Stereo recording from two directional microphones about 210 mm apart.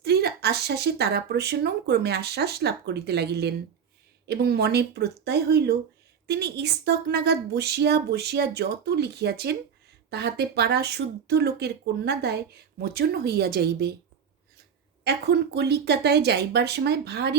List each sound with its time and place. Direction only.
0.0 s speech: 50° right (ahead or behind)
15.0 s speech: 50° right (ahead or behind)